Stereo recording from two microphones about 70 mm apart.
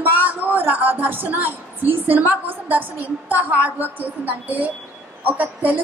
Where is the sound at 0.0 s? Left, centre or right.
Right.